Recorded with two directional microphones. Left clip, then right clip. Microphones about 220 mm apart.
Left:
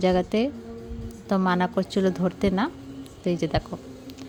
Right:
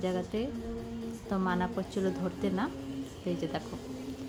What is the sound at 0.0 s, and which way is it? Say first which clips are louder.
Speech: left 11 dB; 40° left (ahead or behind).